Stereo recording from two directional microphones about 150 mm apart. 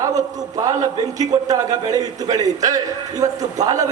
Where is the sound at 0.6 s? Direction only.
20° right (ahead or behind).